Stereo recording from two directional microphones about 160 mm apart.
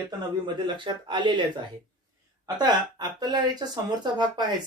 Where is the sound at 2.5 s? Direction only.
25° right (ahead or behind).